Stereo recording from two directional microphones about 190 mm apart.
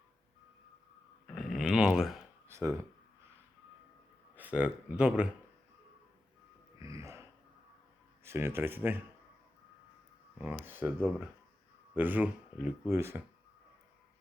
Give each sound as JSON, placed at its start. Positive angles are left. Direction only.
{"t": 1.4, "sound": "a sound", "side_deg": 0}
{"t": 2.5, "sound": "a sound", "side_deg": -15}
{"t": 4.4, "sound": "speech", "side_deg": -5}
{"t": 6.7, "sound": "music", "side_deg": -15}
{"t": 8.2, "sound": "speech", "side_deg": -15}
{"t": 10.3, "sound": "speech", "side_deg": -10}